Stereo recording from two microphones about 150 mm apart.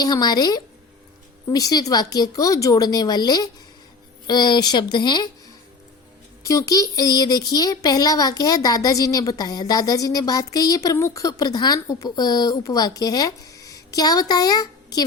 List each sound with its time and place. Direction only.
0.0 s speech: 25° left (ahead or behind)
6.4 s speech: 20° left (ahead or behind)